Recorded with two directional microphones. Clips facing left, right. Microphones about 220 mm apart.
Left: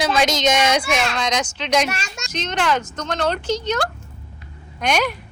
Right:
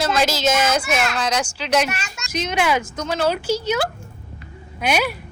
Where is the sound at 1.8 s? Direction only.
35° left (ahead or behind).